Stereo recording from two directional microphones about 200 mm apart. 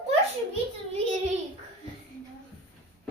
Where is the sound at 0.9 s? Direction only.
30° right (ahead or behind).